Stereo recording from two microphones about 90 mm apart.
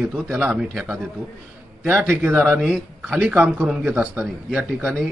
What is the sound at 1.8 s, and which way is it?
A man's voice, 20° right (ahead or behind).